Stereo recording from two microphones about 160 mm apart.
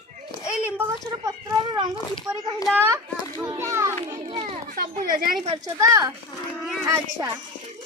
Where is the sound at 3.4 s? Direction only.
20° right (ahead or behind).